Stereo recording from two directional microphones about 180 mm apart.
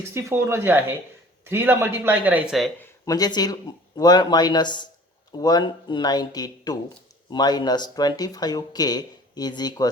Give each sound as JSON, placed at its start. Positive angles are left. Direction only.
{"t": 0.1, "sound": "speech", "side_deg": -15}
{"t": 3.1, "sound": "speech", "side_deg": 20}